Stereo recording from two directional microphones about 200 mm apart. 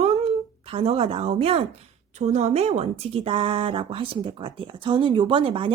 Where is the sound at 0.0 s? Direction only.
30° right (ahead or behind).